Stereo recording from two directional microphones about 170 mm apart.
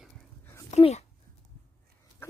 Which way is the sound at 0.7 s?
40° left (ahead or behind).